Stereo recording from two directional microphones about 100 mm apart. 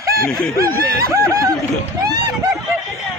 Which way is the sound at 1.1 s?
30° right (ahead or behind).